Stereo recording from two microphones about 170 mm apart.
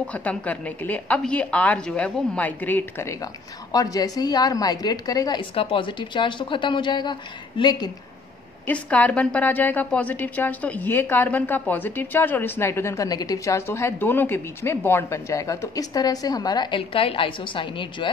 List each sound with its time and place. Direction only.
0.0 s a woman's voice: 10° left (ahead or behind); by 7.9 s 25° left (ahead or behind)
8.6 s a woman's voice: 10° left (ahead or behind); by 18.1 s 30° left (ahead or behind)